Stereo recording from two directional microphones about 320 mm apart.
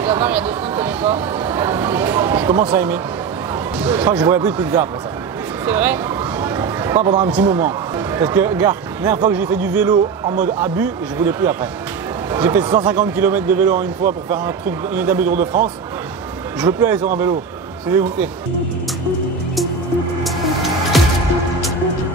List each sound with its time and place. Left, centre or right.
0.0 s speech: centre
6.4 s a sound: centre
7.0 s speech: centre
10.2 s speech: right
10.6 s speech: centre
15.0 s speech: centre
16.6 s speech: centre
20.2 s music: centre